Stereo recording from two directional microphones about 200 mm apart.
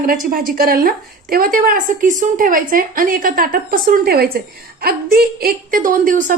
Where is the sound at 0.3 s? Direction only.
45° right (ahead or behind).